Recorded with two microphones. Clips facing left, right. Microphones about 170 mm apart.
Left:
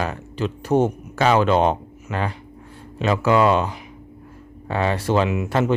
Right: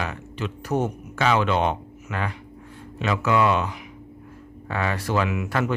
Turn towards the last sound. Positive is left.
turn(degrees=25)  # may be behind; listen again after turning